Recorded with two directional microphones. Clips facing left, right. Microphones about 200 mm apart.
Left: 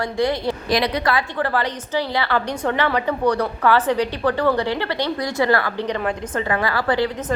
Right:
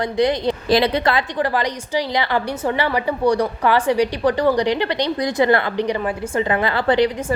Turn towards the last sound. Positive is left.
turn(degrees=-25)  # may be behind; listen again after turning